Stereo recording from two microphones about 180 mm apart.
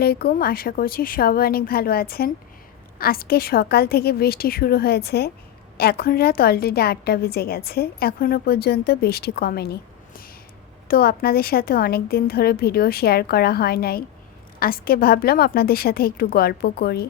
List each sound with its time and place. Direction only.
0.0 s a woman's voice: 60° left (ahead or behind)
10.8 s a woman's voice: 55° left (ahead or behind)